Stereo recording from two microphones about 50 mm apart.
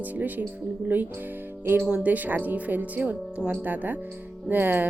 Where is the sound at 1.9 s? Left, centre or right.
Right.